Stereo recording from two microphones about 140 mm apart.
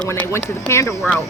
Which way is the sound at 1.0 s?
5° left (ahead or behind).